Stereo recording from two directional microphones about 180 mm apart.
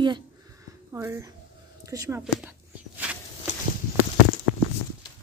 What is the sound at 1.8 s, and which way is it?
Speech, 15° right (ahead or behind).